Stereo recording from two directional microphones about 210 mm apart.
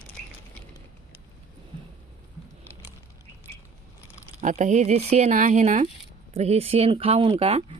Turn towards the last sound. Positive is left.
turn(degrees=-30)  # may be behind; listen again after turning